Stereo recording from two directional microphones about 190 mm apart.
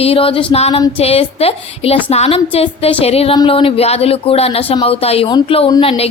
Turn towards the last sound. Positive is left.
turn(degrees=25)  # may be behind; listen again after turning